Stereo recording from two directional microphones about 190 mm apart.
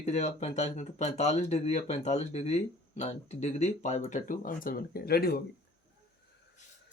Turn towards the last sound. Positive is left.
turn(degrees=55)  # may be behind; listen again after turning